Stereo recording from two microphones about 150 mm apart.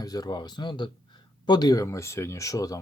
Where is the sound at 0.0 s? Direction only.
25° left (ahead or behind).